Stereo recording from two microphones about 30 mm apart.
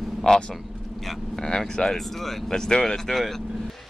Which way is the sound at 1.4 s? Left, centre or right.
Left.